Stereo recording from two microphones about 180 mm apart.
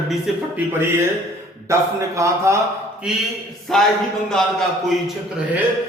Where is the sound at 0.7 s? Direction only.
15° right (ahead or behind).